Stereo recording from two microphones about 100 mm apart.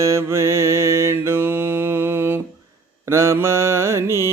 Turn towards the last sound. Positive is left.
turn(degrees=-25)  # may be behind; listen again after turning